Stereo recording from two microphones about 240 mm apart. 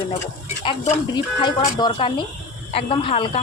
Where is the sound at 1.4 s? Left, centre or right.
Centre.